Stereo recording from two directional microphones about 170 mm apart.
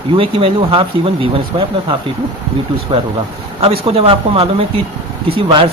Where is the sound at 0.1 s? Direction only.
30° right (ahead or behind).